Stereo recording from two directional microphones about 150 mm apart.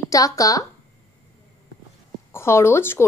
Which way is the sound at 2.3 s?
15° left (ahead or behind).